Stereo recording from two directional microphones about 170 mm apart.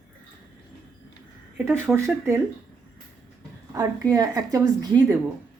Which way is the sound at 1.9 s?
Centre (ahead or behind).